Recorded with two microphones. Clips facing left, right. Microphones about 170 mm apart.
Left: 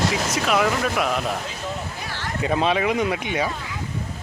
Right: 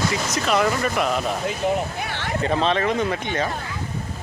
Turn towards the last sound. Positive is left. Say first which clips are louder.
# even
turn(degrees=10)  # may be behind; listen again after turning